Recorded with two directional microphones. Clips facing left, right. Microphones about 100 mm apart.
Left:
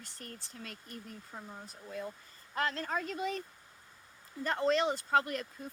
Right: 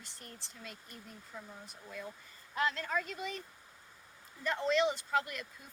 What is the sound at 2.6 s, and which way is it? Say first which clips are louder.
Speech: even; 40° left (ahead or behind).